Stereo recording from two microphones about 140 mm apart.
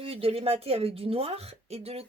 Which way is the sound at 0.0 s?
45° right (ahead or behind).